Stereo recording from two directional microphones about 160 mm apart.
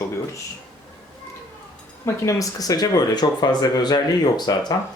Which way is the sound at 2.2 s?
20° left (ahead or behind).